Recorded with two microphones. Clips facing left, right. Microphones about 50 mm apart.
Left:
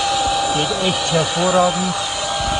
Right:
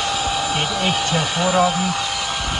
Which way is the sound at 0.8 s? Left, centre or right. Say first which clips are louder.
Left 2 dB; right.